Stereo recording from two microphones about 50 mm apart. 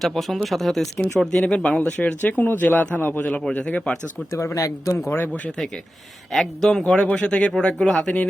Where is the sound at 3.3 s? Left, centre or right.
Centre.